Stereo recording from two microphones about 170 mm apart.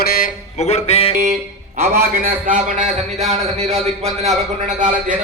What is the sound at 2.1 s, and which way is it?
A man's voice, 55° right (ahead or behind).